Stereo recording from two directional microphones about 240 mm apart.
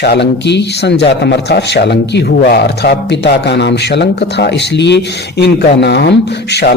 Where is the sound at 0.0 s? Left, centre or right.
Left.